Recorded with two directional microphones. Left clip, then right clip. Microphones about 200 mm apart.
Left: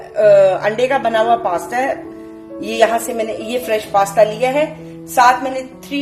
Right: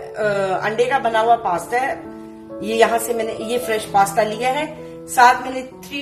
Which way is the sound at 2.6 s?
45° left (ahead or behind).